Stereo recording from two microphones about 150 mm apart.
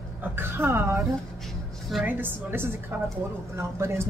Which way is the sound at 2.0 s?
15° right (ahead or behind).